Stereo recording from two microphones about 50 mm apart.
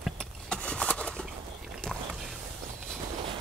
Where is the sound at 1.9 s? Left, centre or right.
Centre.